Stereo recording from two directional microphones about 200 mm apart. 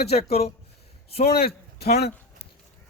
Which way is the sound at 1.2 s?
50° left (ahead or behind).